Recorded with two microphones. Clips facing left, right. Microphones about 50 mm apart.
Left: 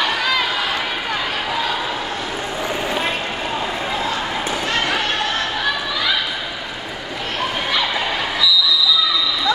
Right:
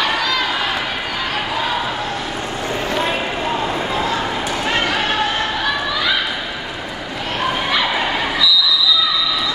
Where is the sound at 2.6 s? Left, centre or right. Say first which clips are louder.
Right 1 dB; centre.